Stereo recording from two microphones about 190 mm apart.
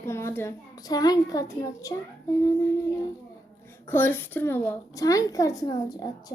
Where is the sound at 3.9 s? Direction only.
10° left (ahead or behind).